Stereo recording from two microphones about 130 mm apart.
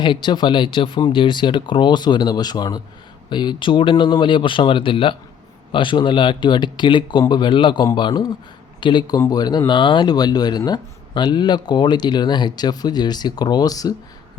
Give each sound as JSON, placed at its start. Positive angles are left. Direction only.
{"t": 0.0, "sound": "speech", "side_deg": 35}